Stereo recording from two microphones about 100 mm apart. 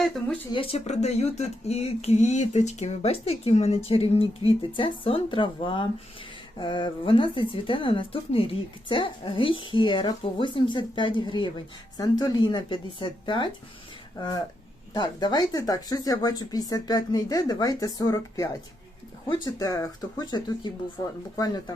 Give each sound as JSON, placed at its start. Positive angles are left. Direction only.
{"t": 0.5, "sound": "a woman's voice", "side_deg": 70}
{"t": 14.2, "sound": "a woman's voice", "side_deg": 40}
{"t": 19.5, "sound": "a woman's voice", "side_deg": 40}